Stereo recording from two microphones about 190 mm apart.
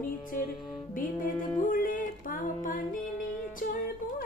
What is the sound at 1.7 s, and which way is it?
Music, 45° left (ahead or behind).